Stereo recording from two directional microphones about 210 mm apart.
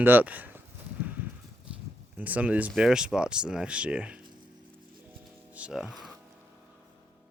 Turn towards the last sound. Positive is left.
turn(degrees=0)  # may be behind; listen again after turning